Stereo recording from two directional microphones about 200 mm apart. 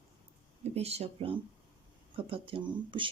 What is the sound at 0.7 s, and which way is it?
Speech, 30° right (ahead or behind).